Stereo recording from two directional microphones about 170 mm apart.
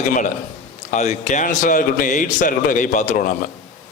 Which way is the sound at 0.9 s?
40° left (ahead or behind).